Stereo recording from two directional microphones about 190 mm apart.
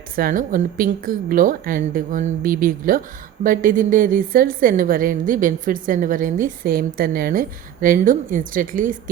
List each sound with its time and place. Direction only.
0.2 s a woman's voice: 45° right (ahead or behind)